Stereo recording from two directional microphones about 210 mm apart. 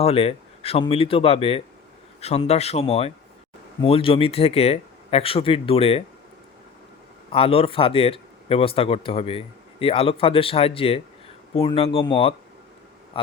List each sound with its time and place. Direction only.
0.0 s speech: 30° left (ahead or behind)
7.3 s speech: 25° left (ahead or behind)